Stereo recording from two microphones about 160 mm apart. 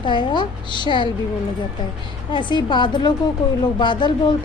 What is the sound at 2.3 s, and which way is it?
A woman's voice, 30° left (ahead or behind).